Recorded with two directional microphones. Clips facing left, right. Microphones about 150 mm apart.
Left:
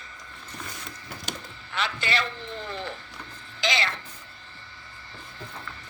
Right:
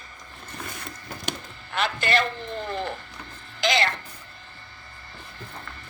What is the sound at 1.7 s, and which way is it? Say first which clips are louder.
A woman's voice: right 5 dB; 50° right (ahead or behind).